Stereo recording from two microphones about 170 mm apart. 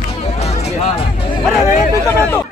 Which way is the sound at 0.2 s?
40° left (ahead or behind).